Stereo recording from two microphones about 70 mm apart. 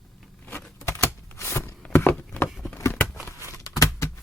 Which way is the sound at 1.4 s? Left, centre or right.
Left.